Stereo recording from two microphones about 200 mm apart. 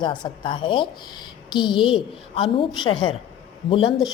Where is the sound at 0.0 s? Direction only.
20° left (ahead or behind).